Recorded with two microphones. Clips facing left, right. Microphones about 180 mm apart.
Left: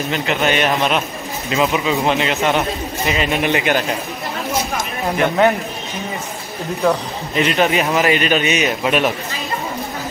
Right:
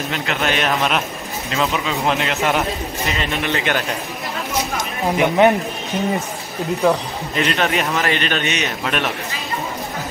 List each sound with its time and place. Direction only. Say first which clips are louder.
0.1 s a man's voice: left 4 dB; centre (ahead or behind)
3.2 s a man's voice: left 5 dB; 15° left (ahead or behind)
5.1 s a man's voice: right 1 dB; 15° right (ahead or behind)
7.3 s a man's voice: left 3 dB; 5° left (ahead or behind)